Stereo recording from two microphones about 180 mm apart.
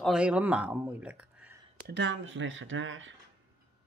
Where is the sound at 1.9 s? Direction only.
85° right.